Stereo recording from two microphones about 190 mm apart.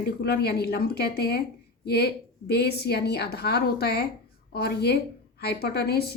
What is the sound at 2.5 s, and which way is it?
Speech, 60° left (ahead or behind).